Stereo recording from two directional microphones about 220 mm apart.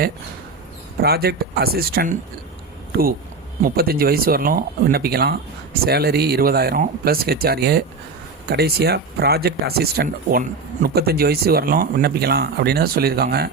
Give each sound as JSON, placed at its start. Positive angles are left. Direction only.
{"t": 1.0, "sound": "speech", "side_deg": -45}
{"t": 3.6, "sound": "speech", "side_deg": -45}